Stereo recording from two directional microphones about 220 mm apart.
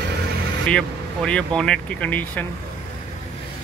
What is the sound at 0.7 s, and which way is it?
Speech, 5° left (ahead or behind).